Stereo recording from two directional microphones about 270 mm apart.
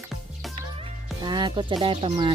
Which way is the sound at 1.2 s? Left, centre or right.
Centre.